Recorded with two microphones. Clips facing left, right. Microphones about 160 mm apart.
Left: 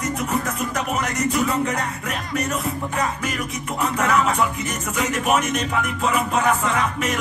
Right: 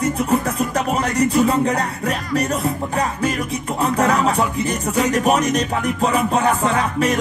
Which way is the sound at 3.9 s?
35° right (ahead or behind).